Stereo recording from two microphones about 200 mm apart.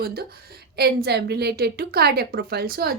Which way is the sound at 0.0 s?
50° right (ahead or behind).